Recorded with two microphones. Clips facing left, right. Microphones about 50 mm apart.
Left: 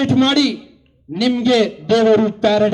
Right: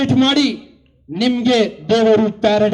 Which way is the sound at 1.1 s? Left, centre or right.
Right.